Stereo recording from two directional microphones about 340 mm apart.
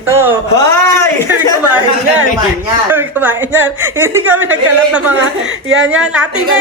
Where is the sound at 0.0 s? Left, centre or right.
Centre.